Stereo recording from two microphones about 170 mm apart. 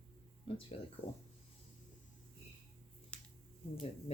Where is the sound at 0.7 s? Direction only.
35° left (ahead or behind).